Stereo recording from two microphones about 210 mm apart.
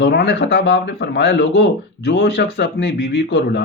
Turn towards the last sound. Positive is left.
turn(degrees=55)  # may be behind; listen again after turning